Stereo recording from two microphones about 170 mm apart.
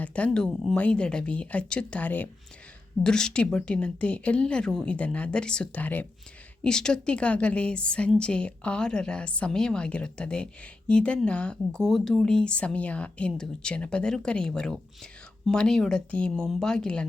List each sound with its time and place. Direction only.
0.0 s a woman's voice: 5° left (ahead or behind)